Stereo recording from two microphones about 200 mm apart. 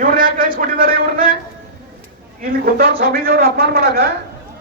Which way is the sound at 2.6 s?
50° right (ahead or behind).